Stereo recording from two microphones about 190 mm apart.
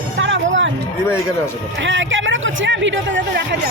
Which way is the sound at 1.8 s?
80° right.